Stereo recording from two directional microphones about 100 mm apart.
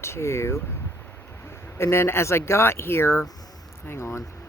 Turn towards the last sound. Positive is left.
turn(degrees=30)  # may be behind; listen again after turning